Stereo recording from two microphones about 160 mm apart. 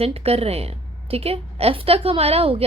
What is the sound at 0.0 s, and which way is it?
A woman's voice, 40° right (ahead or behind).